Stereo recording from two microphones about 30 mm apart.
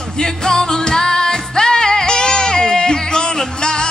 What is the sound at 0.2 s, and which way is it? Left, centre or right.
Music, left.